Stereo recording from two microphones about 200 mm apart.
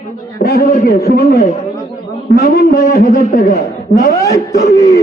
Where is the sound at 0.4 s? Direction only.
50° left (ahead or behind).